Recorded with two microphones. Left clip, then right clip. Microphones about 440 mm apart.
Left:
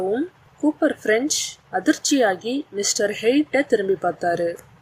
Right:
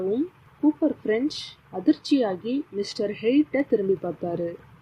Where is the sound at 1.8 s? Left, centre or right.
Centre.